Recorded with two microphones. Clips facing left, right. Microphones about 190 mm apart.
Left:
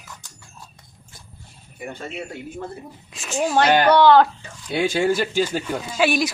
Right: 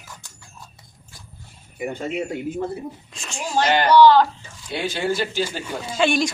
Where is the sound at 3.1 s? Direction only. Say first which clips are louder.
Left 4 dB; centre (ahead or behind).